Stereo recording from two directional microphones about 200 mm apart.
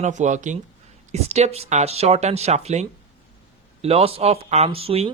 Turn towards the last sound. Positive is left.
turn(degrees=-30)  # may be behind; listen again after turning